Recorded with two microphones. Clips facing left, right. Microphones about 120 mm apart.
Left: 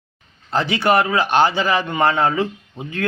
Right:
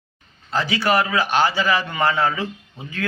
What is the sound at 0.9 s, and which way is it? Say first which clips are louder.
Speech: left 3 dB; 25° left (ahead or behind).